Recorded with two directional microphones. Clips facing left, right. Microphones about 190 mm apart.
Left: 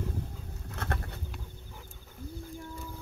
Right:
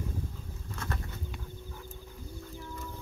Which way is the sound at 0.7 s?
60° left (ahead or behind).